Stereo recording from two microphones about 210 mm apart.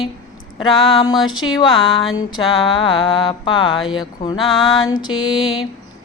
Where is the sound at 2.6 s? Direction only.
25° left (ahead or behind).